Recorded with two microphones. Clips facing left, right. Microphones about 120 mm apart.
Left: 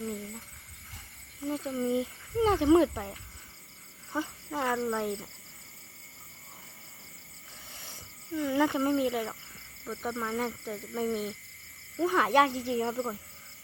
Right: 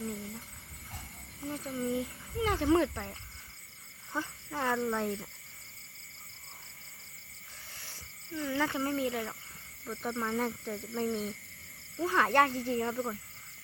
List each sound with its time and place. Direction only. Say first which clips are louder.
1.5 s speech: left 4 dB; 20° left (ahead or behind); by 5.3 s 5° left (ahead or behind)
8.4 s speech: left 5 dB; 15° left (ahead or behind)